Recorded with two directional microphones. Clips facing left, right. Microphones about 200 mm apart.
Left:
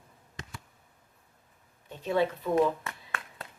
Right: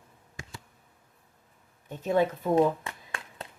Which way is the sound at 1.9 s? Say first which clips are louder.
Right 2 dB; 45° right (ahead or behind).